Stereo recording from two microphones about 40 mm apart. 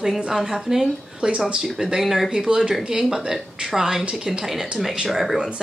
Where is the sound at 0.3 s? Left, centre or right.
Centre.